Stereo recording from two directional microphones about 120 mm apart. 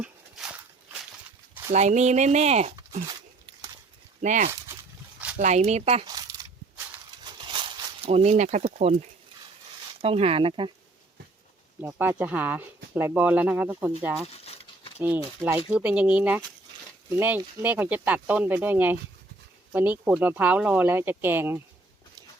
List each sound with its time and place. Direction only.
0.0 s walk: 5° right (ahead or behind)
1.7 s speech: 70° right (ahead or behind)
4.2 s speech: 90° right
5.4 s speech: 70° right (ahead or behind)
6.1 s a sound: 30° right (ahead or behind)
7.3 s a sound: 40° right (ahead or behind); by 9.0 s 70° right (ahead or behind)
10.0 s speech: 55° right (ahead or behind)
11.9 s speech: 15° right (ahead or behind)
14.3 s a sound: 60° left (ahead or behind)
15.0 s speech: 20° right (ahead or behind)
15.7 s speech: 10° right (ahead or behind)